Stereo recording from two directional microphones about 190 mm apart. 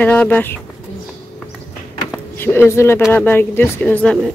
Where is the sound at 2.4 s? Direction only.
10° left (ahead or behind).